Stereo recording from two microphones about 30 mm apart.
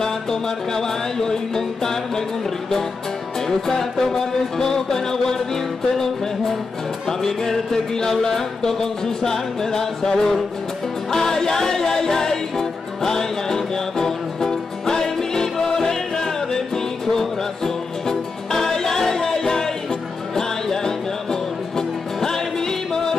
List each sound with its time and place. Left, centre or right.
0.0 s music: centre
3.3 s music: centre
7.1 s music: centre